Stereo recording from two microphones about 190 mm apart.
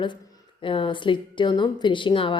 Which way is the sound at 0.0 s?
20° left (ahead or behind).